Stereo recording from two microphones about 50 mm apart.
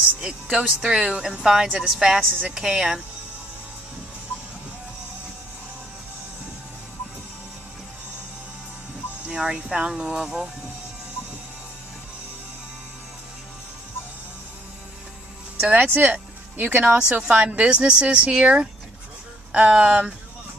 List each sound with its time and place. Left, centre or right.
0.5 s speech: centre
0.7 s a woman's voice: centre
9.3 s a woman's voice: centre
15.7 s speech: right